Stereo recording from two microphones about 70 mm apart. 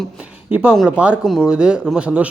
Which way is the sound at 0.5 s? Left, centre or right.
Centre.